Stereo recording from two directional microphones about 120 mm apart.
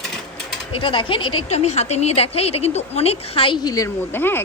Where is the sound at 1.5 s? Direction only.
65° left (ahead or behind).